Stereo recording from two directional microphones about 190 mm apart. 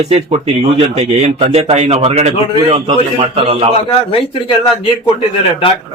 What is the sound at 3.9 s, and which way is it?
A man's voice, 30° left (ahead or behind).